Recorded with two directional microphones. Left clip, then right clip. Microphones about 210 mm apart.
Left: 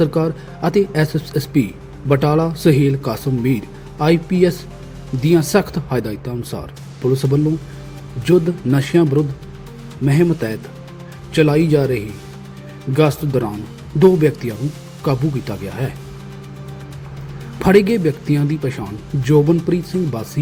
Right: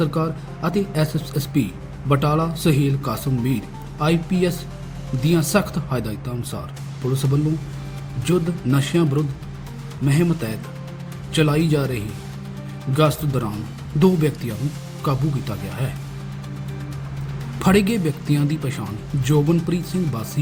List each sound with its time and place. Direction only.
0.0 s a man's voice: 30° left (ahead or behind)
8.2 s a man's voice: 30° left (ahead or behind)
17.6 s a man's voice: 30° left (ahead or behind)